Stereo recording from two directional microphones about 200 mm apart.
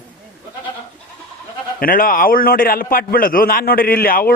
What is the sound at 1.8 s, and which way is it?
A man's voice, 45° left (ahead or behind).